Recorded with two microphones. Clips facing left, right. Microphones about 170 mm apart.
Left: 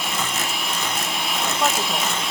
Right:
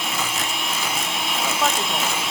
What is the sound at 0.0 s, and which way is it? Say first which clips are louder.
Vacuum cleaner: even; centre (ahead or behind).